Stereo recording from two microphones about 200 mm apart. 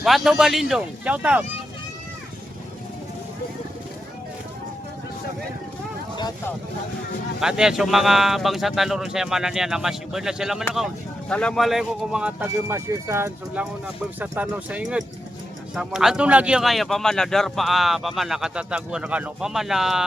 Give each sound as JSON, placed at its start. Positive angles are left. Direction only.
{"t": 0.0, "sound": "speech", "side_deg": 0}
{"t": 6.1, "sound": "speech", "side_deg": 20}
{"t": 7.3, "sound": "speech", "side_deg": -5}